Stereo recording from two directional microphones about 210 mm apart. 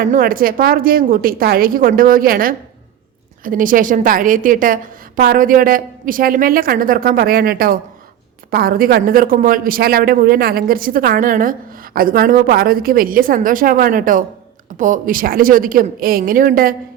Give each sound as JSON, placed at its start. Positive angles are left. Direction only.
{"t": 0.0, "sound": "a woman's voice", "side_deg": -45}